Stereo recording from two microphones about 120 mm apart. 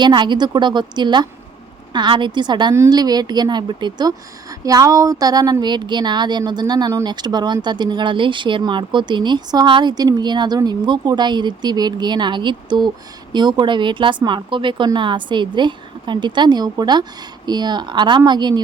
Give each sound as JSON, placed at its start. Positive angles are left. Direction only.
{"t": 0.0, "sound": "speech", "side_deg": -40}